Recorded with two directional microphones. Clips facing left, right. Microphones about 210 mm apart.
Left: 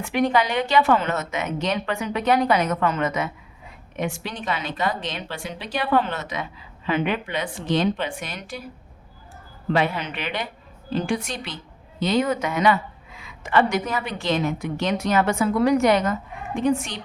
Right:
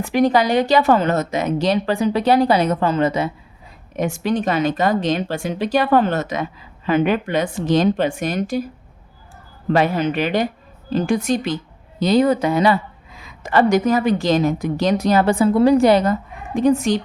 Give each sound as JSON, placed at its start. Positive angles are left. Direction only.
{"t": 0.0, "sound": "speech", "side_deg": -35}
{"t": 3.9, "sound": "speech", "side_deg": -45}
{"t": 9.7, "sound": "speech", "side_deg": -45}